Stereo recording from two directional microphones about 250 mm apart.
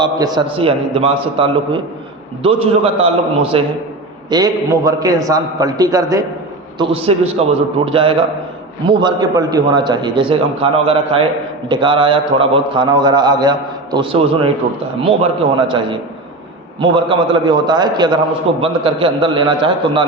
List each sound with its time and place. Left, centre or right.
0.0 s a man's voice: centre